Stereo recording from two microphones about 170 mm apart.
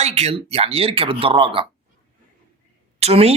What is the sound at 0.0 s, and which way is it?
Speech, 35° right (ahead or behind).